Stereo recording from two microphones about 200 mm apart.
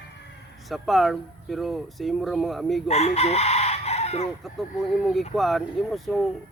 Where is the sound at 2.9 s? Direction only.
30° left (ahead or behind).